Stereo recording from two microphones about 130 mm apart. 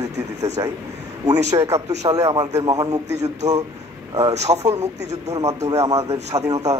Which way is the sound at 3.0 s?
60° right (ahead or behind).